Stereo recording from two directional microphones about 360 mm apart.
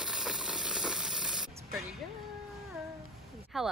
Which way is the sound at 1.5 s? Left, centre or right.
Centre.